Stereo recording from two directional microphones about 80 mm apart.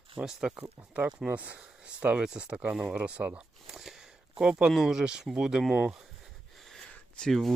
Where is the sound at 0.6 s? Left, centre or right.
Right.